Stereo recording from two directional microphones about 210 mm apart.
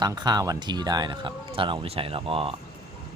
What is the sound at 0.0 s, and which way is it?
Speech, 20° right (ahead or behind).